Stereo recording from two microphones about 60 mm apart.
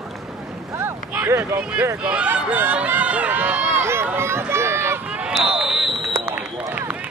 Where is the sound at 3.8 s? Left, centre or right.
Right.